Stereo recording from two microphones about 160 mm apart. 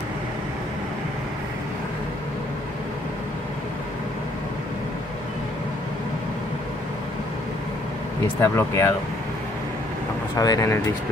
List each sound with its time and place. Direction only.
8.4 s speech: 15° left (ahead or behind)
10.3 s speech: 25° left (ahead or behind)